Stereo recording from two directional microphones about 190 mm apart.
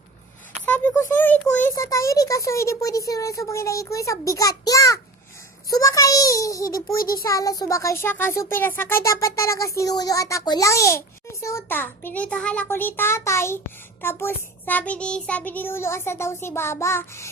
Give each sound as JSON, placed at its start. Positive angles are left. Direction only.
{"t": 0.6, "sound": "a child's voice", "side_deg": 10}